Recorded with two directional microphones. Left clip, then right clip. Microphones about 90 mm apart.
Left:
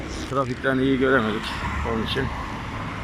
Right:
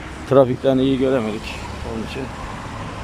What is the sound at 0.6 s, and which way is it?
Speech, 50° right (ahead or behind).